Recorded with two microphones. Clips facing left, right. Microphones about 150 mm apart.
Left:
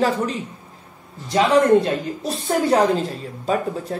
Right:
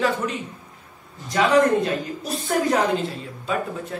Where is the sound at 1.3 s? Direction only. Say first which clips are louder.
Left 3 dB; 25° left (ahead or behind).